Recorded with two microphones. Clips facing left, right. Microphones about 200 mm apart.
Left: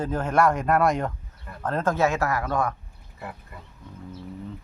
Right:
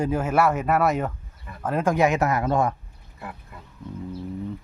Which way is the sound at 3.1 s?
Centre (ahead or behind).